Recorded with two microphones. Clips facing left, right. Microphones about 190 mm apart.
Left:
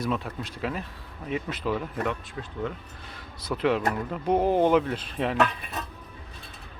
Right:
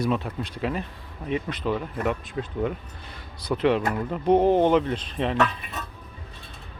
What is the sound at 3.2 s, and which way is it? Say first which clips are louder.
Speech: right 4 dB; centre (ahead or behind).